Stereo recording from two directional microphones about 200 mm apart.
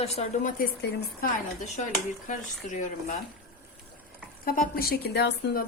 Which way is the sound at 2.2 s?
40° left (ahead or behind).